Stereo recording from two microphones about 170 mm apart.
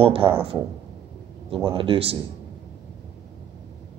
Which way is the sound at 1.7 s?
30° right (ahead or behind).